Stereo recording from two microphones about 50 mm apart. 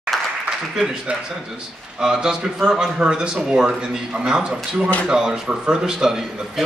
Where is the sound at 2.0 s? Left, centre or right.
Centre.